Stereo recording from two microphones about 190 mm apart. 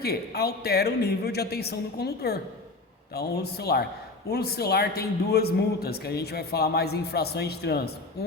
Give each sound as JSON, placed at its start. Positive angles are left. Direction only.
{"t": 0.0, "sound": "a man's voice", "side_deg": 55}